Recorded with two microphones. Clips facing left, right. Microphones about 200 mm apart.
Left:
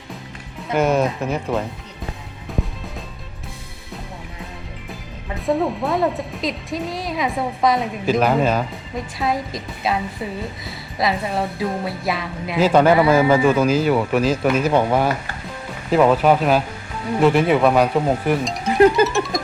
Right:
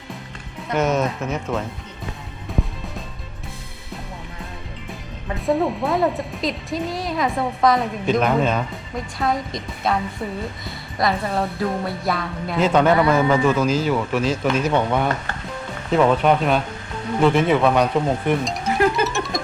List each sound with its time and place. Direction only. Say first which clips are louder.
0.7 s speech: left 2 dB; centre (ahead or behind)
5.5 s speech: even; centre (ahead or behind)
10.7 s music: even; centre (ahead or behind)
11.3 s speech: even; centre (ahead or behind)
14.8 s speech: left 3 dB; 30° left (ahead or behind)
15.9 s speech: left 2 dB; 5° left (ahead or behind)
18.7 s music: left 6 dB; 20° left (ahead or behind)
19.0 s music: left 3 dB; centre (ahead or behind)